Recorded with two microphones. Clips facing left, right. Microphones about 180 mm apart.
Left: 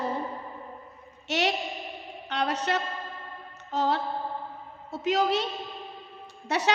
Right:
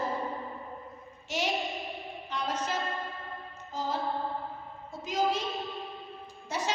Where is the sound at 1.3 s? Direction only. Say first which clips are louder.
Left 4 dB; 70° left (ahead or behind).